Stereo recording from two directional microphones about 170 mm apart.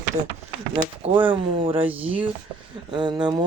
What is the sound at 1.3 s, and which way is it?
Speech, 30° right (ahead or behind).